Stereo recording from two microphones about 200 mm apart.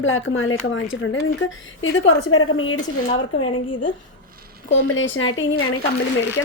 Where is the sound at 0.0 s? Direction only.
90° left.